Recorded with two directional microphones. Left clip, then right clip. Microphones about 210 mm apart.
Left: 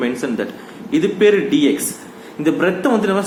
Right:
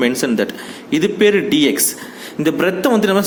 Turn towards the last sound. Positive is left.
turn(degrees=-40)  # may be behind; listen again after turning